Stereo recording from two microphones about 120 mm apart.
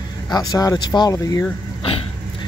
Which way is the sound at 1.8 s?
50° left (ahead or behind).